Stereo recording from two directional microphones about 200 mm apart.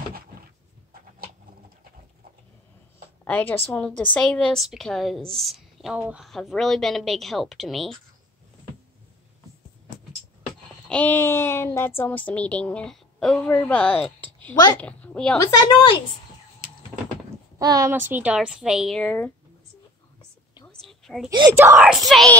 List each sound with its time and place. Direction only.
3.3 s a woman's voice: 10° left (ahead or behind)
10.9 s a woman's voice: 5° left (ahead or behind)
15.6 s a woman's voice: 25° left (ahead or behind)
17.6 s a woman's voice: 20° right (ahead or behind); by 19.3 s 5° left (ahead or behind)
20.6 s a sound: centre (ahead or behind)
21.5 s a woman's voice: 10° right (ahead or behind)